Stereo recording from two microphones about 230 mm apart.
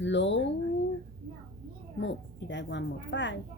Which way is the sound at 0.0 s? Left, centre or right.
Left.